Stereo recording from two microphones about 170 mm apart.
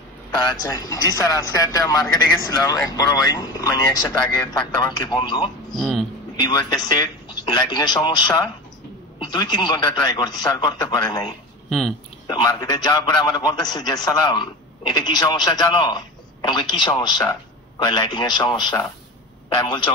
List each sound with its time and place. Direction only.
0.4 s a man's voice: 20° left (ahead or behind)
5.8 s speech: centre (ahead or behind)
6.3 s a man's voice: 25° left (ahead or behind)